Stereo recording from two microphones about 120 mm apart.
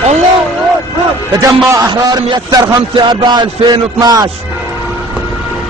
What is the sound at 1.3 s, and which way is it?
Speech, 25° right (ahead or behind).